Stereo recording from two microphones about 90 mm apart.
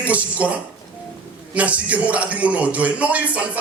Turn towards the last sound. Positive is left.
turn(degrees=-15)  # may be behind; listen again after turning